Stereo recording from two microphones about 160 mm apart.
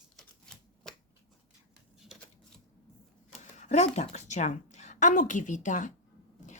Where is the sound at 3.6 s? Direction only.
45° left (ahead or behind).